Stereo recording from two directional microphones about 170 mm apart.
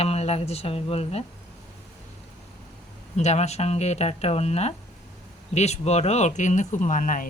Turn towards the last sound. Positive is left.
turn(degrees=50)  # may be behind; listen again after turning